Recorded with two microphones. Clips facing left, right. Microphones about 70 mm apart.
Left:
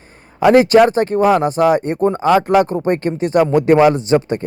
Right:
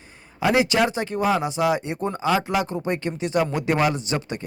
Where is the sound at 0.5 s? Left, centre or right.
Left.